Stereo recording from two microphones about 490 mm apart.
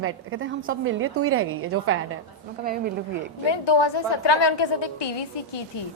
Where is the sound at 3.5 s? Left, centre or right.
Left.